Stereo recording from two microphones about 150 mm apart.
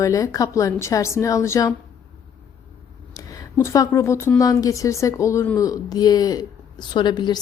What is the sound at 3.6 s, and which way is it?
A woman's voice, 20° left (ahead or behind).